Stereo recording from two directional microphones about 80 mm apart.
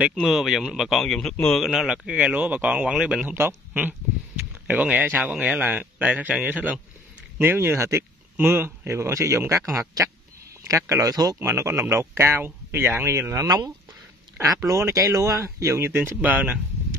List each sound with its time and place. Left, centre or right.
0.1 s speech: centre
1.7 s speech: centre
3.3 s speech: right
7.3 s speech: right
10.7 s speech: right
11.3 s speech: right